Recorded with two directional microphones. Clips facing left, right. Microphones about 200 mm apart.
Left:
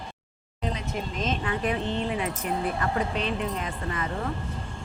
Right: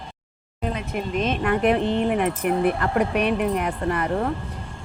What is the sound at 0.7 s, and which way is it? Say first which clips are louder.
Speech: right 9 dB; 60° right (ahead or behind).